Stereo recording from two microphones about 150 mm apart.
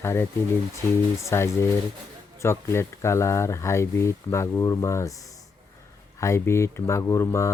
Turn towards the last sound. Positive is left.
turn(degrees=20)  # may be behind; listen again after turning